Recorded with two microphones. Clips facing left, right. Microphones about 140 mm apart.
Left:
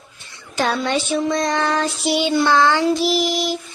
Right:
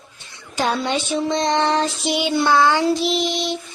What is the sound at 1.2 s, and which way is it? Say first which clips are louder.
Child singing: right 1 dB; 25° right (ahead or behind).